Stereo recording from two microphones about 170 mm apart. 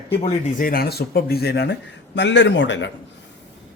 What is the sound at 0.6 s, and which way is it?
Speech, 60° left (ahead or behind).